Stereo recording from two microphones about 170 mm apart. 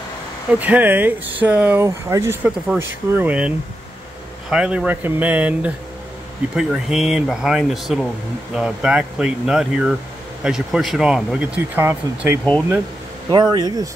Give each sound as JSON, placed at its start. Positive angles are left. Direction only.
{"t": 0.6, "sound": "speech", "side_deg": -10}
{"t": 13.3, "sound": "speech", "side_deg": -25}